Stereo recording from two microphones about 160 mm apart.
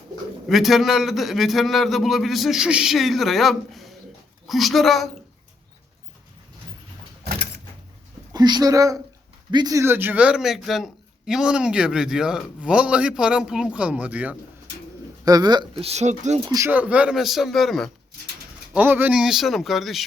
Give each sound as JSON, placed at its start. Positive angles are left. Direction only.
{"t": 0.4, "sound": "speech", "side_deg": 0}
{"t": 8.3, "sound": "speech", "side_deg": -25}
{"t": 15.2, "sound": "speech", "side_deg": -25}
{"t": 15.9, "sound": "speech", "side_deg": -45}
{"t": 16.5, "sound": "speech", "side_deg": -20}
{"t": 16.7, "sound": "speech", "side_deg": -10}
{"t": 18.7, "sound": "speech", "side_deg": -10}